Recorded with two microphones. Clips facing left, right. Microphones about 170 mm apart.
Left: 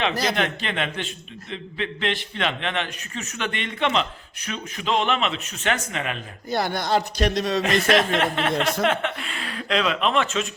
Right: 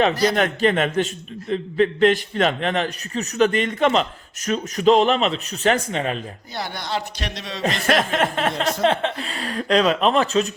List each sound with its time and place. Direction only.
0.0 s a man's voice: 40° right (ahead or behind)
6.5 s speech: 50° left (ahead or behind)
7.9 s a man's voice: 45° right (ahead or behind)